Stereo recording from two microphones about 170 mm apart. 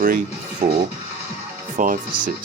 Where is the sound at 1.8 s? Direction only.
50° right (ahead or behind).